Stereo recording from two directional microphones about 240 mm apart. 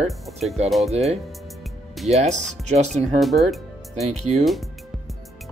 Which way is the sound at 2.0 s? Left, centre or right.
Right.